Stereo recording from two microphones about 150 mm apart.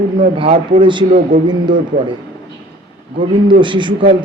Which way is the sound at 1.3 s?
60° right (ahead or behind).